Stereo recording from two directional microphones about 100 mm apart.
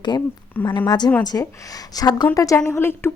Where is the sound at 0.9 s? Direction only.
45° left (ahead or behind).